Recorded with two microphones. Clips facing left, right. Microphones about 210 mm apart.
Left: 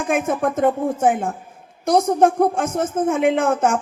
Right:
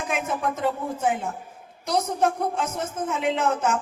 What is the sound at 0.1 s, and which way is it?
Speech, 50° left (ahead or behind).